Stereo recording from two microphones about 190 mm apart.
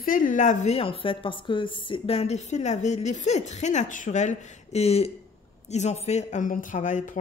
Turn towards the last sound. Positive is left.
turn(degrees=40)  # may be behind; listen again after turning